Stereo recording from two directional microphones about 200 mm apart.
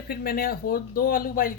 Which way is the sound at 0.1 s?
50° left (ahead or behind).